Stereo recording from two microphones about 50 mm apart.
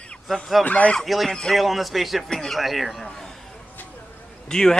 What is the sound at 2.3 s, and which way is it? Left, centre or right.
Speech, centre.